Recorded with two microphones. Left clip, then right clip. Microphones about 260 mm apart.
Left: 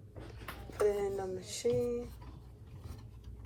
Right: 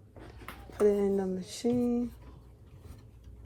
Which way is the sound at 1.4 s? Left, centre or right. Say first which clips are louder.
Right 1 dB; right.